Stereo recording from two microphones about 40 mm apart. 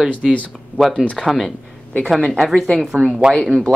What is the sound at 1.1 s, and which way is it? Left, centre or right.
Speech, centre.